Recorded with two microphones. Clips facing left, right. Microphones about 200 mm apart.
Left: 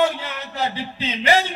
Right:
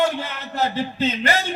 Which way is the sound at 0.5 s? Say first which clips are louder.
Right 4 dB; 50° right (ahead or behind).